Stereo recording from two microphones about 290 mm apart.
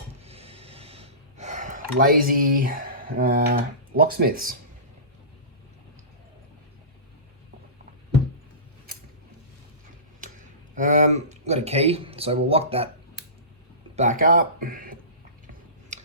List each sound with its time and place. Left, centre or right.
0.3 s gasp: right
10.8 s speech: right
13.9 s speech: right
15.9 s tick-tock: right